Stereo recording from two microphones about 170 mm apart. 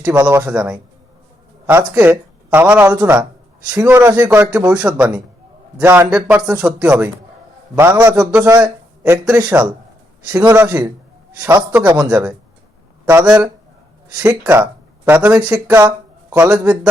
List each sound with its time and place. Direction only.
0.0 s a man's voice: 10° right (ahead or behind)
14.2 s speech: 10° right (ahead or behind)